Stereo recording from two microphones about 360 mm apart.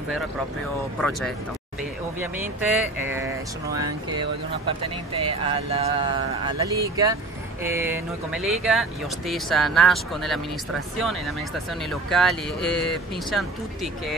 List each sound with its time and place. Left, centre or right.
2.1 s speech: centre